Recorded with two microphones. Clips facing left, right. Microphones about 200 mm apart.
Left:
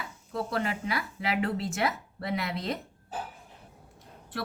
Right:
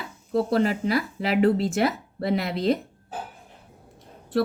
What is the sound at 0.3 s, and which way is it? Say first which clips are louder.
Speech: right 9 dB; 35° right (ahead or behind).